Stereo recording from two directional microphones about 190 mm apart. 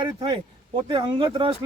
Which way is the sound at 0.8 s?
25° right (ahead or behind).